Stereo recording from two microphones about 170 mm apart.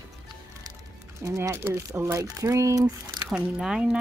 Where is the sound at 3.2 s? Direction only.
5° right (ahead or behind).